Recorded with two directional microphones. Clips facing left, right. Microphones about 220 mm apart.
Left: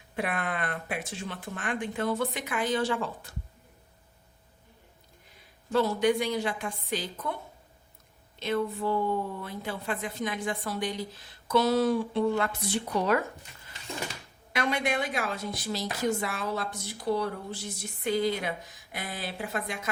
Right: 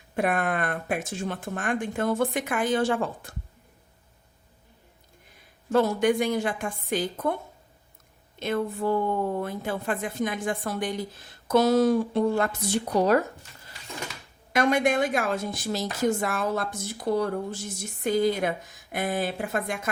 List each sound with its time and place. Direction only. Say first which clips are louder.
0.2 s a woman's voice: right 6 dB; 45° right (ahead or behind)
5.7 s a woman's voice: right 3 dB; 50° right (ahead or behind)
8.4 s a woman's voice: right 2 dB; 50° right (ahead or behind)
14.5 s a woman's voice: right 6 dB; 45° right (ahead or behind)